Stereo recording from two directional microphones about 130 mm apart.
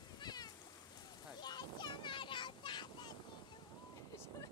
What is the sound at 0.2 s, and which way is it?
Cat, 30° left (ahead or behind).